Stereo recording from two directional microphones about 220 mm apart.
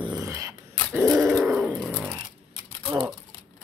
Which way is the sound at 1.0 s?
Centre (ahead or behind).